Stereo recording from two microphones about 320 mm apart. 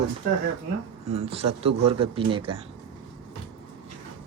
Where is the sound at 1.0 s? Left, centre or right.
Centre.